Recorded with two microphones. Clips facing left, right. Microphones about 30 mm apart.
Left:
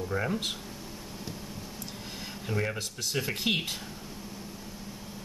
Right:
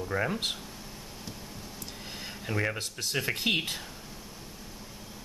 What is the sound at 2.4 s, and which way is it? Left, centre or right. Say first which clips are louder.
Speech: right 1 dB; centre.